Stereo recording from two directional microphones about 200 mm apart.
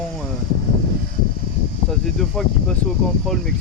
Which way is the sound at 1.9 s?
Centre (ahead or behind).